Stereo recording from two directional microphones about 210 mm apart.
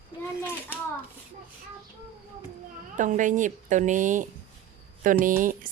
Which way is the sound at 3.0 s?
35° right (ahead or behind).